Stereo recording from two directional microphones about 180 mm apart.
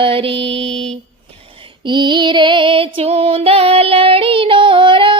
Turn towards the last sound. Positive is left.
turn(degrees=-30)  # may be behind; listen again after turning